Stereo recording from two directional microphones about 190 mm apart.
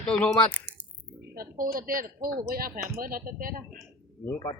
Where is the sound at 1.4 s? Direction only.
50° right (ahead or behind).